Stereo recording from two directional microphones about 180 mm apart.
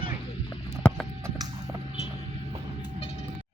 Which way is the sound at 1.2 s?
15° right (ahead or behind).